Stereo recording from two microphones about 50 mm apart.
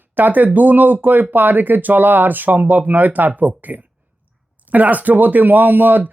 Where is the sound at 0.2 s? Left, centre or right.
Right.